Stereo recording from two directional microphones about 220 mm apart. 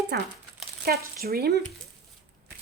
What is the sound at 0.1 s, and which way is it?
Speech, 50° right (ahead or behind).